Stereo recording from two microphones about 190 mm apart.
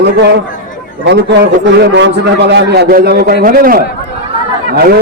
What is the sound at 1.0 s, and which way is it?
A man's voice, 65° right (ahead or behind).